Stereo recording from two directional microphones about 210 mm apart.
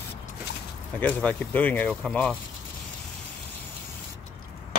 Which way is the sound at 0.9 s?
5° left (ahead or behind).